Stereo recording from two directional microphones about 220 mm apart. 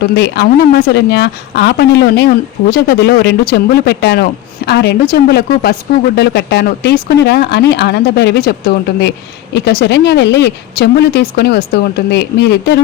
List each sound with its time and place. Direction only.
0.0 s speech: 50° left (ahead or behind)